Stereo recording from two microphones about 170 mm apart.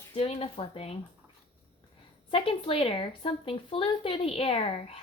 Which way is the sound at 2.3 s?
30° left (ahead or behind).